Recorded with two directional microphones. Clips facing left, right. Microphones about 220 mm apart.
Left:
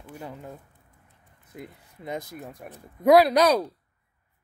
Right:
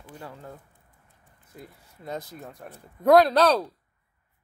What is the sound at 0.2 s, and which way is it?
Speech, 20° left (ahead or behind).